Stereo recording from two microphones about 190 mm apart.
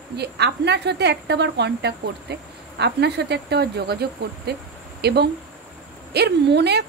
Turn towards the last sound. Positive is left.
turn(degrees=-60)  # may be behind; listen again after turning